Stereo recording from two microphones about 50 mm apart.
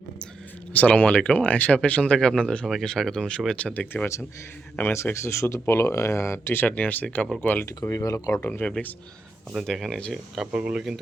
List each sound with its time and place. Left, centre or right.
0.7 s speech: left
3.8 s speech: left
4.8 s speech: left
5.1 s speech: left
5.6 s speech: left
6.7 s speech: left
7.6 s speech: left
8.6 s speech: left
9.7 s speech: centre
10.4 s speech: right